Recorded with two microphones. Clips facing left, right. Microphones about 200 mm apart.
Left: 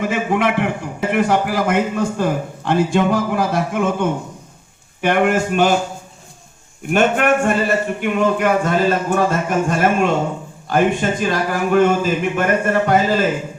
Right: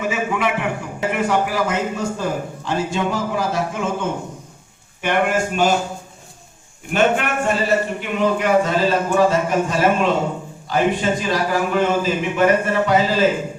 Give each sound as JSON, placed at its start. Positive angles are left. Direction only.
{"t": 0.0, "sound": "a man's voice", "side_deg": 65}
{"t": 6.9, "sound": "a man's voice", "side_deg": 50}